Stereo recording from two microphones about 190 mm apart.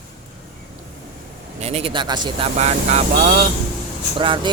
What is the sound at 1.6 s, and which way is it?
Speech, 35° right (ahead or behind).